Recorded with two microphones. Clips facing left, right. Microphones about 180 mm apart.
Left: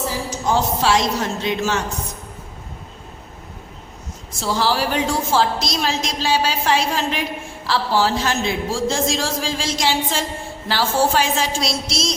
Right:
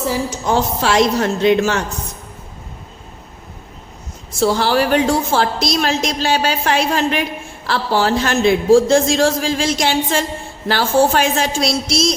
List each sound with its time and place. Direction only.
0.5 s a woman's voice: 60° right (ahead or behind)
4.4 s a woman's voice: 60° right (ahead or behind)